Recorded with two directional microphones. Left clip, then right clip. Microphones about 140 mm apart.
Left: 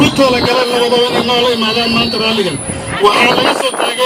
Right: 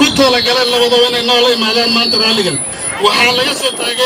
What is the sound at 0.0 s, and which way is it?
Speech, 20° right (ahead or behind).